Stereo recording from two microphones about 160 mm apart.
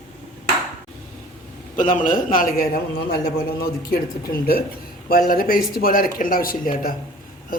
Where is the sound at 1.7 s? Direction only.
55° left (ahead or behind).